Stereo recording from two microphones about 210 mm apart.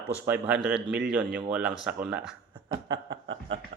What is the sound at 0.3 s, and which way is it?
Speech, 5° right (ahead or behind).